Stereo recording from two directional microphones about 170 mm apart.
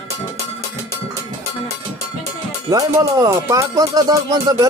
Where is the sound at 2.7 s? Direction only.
20° right (ahead or behind).